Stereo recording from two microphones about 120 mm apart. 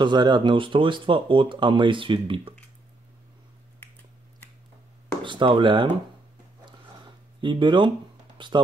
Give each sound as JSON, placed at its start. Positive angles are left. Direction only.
{"t": 0.0, "sound": "speech", "side_deg": -40}
{"t": 5.2, "sound": "speech", "side_deg": -45}
{"t": 7.4, "sound": "speech", "side_deg": -40}